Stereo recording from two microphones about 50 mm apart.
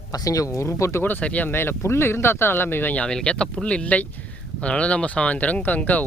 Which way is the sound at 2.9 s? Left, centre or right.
Centre.